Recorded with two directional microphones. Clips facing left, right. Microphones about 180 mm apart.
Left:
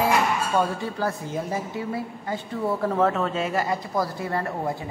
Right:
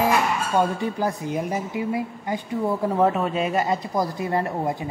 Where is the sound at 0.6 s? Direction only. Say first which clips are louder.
Right 5 dB; 20° right (ahead or behind).